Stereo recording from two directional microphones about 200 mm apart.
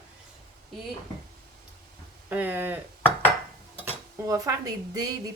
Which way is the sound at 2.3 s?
10° right (ahead or behind).